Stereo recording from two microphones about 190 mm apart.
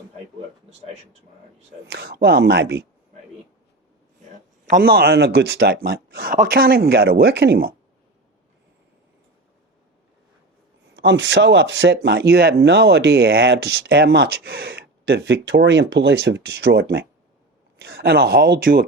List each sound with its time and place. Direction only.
1.9 s speech: 55° right (ahead or behind)
4.7 s speech: 55° right (ahead or behind)
10.9 s speech: 70° right (ahead or behind); by 18.9 s 50° right (ahead or behind)